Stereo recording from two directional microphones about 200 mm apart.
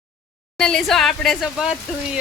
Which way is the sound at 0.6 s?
5° left (ahead or behind).